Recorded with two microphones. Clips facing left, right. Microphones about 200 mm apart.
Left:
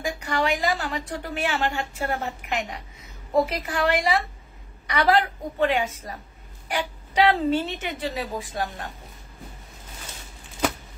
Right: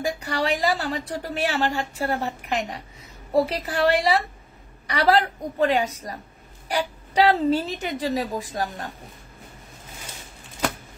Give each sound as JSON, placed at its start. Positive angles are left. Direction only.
{"t": 0.0, "sound": "a woman's voice", "side_deg": -35}